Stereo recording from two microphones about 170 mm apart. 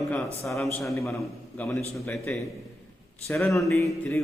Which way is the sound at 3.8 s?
15° left (ahead or behind).